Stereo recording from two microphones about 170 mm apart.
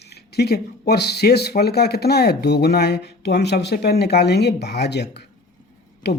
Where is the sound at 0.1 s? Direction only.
70° left (ahead or behind).